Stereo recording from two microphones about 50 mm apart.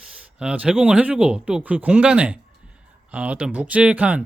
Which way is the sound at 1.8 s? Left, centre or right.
Centre.